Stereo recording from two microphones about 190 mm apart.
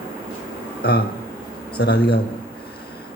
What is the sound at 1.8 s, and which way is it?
Speech, 60° left (ahead or behind).